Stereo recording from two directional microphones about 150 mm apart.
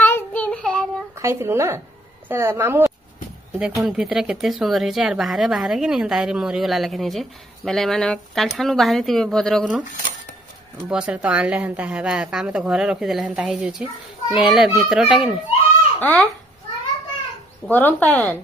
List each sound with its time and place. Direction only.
0.0 s child singing: 10° left (ahead or behind)
1.1 s a woman's voice: 20° right (ahead or behind)
3.5 s speech: centre (ahead or behind)
10.9 s a woman's voice: 5° right (ahead or behind)
16.0 s speech: 10° left (ahead or behind)
17.6 s speech: 10° left (ahead or behind)